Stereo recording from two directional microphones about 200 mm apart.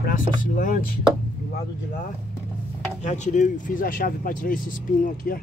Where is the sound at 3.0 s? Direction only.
35° left (ahead or behind).